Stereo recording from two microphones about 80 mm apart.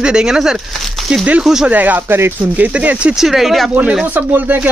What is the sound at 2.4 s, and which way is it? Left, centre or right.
Speech, centre.